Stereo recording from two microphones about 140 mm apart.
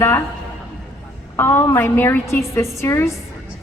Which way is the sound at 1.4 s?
15° left (ahead or behind).